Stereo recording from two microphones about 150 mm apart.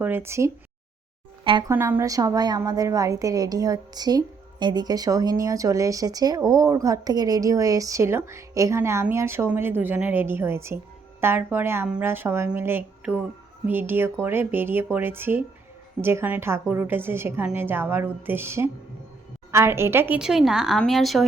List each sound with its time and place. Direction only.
0.0 s a woman's voice: 15° right (ahead or behind)
1.5 s speech: 30° right (ahead or behind)
1.7 s a woman's voice: 15° right (ahead or behind); by 21.2 s centre (ahead or behind)